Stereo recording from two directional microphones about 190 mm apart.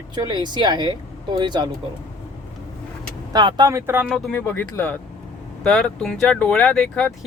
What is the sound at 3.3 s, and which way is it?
Speech, 20° right (ahead or behind).